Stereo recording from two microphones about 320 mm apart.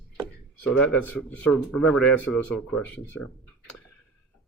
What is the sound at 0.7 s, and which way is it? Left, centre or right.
Speech, centre.